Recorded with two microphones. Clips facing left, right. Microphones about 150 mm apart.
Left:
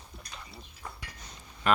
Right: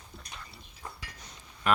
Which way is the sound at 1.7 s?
Centre (ahead or behind).